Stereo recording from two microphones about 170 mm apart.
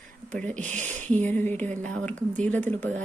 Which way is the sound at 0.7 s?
45° right (ahead or behind).